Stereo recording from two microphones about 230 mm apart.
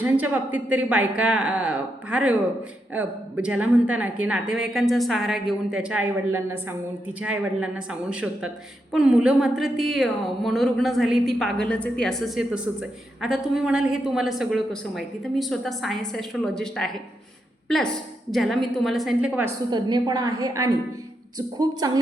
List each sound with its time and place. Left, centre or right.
0.0 s a woman's voice: centre
19.7 s a woman's voice: centre